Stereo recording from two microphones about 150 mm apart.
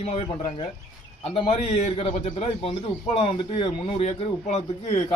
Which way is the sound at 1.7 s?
45° left (ahead or behind).